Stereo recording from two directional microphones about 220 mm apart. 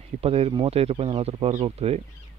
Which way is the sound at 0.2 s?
25° right (ahead or behind).